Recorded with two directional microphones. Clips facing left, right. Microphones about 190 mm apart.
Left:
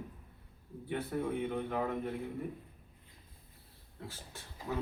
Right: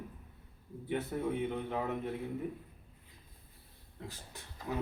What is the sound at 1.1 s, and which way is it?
Speech, 20° right (ahead or behind).